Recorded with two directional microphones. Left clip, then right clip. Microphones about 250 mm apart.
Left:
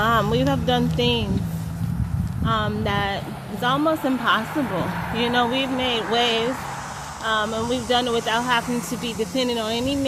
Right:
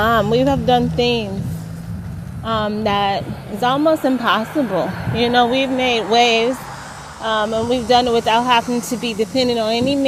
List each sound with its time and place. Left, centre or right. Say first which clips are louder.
0.0 s speech: right 5 dB; right
2.4 s speech: right 4 dB; right